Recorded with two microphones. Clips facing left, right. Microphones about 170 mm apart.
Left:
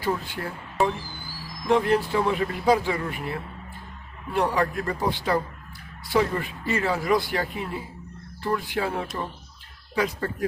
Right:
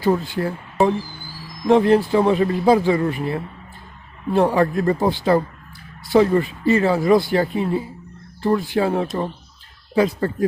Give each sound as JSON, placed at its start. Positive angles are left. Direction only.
{"t": 0.4, "sound": "speech", "side_deg": -35}
{"t": 1.6, "sound": "speech", "side_deg": -35}